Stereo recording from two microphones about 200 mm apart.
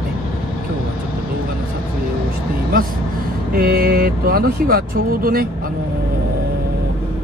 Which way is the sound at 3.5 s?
45° right (ahead or behind).